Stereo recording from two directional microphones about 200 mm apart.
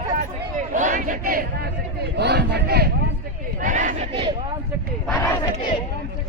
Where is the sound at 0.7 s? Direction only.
40° right (ahead or behind).